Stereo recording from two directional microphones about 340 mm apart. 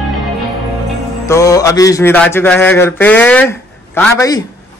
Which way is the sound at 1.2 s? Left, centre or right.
Centre.